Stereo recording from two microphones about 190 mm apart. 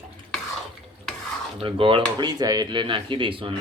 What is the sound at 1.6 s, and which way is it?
Speech, 30° right (ahead or behind).